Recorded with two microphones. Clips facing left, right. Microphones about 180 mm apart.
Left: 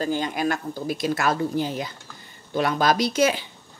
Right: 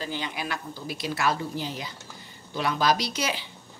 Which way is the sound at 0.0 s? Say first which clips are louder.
Left 8 dB; 45° left (ahead or behind).